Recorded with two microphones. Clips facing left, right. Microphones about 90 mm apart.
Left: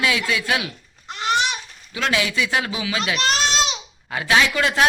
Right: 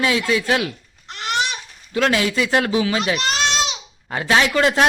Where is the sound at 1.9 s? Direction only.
40° right (ahead or behind).